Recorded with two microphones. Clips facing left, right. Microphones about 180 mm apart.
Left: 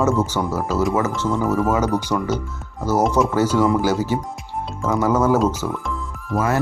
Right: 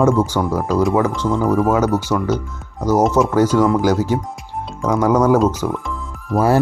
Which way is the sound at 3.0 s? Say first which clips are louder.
Right 3 dB; centre (ahead or behind).